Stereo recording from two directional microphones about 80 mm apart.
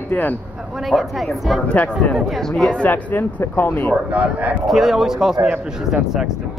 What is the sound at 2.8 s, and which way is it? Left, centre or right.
Speech, left.